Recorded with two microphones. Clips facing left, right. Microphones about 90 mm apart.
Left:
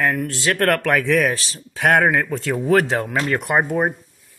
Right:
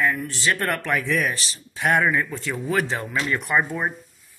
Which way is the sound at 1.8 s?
75° left (ahead or behind).